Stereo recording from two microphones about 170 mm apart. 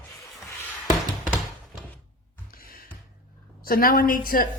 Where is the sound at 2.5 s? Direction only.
60° left (ahead or behind).